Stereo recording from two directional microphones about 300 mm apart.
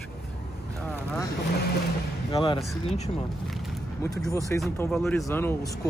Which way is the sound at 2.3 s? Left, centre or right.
Centre.